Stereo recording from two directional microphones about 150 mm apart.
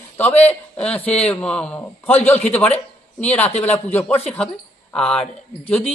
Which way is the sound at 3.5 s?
45° left (ahead or behind).